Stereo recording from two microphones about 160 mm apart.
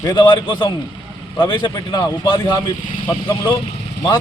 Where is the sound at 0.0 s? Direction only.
25° left (ahead or behind).